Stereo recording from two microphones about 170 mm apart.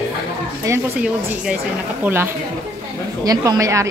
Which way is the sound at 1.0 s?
5° right (ahead or behind).